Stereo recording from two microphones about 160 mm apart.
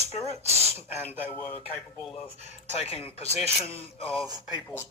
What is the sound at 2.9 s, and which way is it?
Speech, 40° left (ahead or behind).